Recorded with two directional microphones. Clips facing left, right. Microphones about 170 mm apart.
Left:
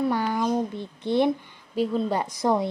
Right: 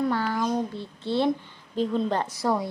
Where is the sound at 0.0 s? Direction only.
15° left (ahead or behind).